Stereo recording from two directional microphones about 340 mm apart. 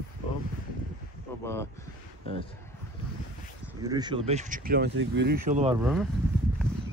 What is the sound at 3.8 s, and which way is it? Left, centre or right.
Speech, centre.